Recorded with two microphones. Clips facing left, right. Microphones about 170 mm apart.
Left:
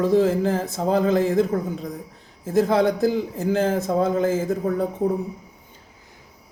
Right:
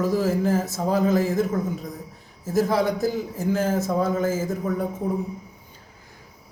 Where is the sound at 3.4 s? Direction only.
30° left (ahead or behind).